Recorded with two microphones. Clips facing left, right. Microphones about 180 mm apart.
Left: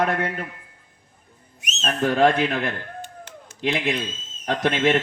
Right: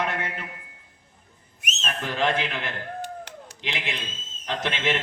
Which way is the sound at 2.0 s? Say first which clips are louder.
Left 8 dB; 50° left (ahead or behind).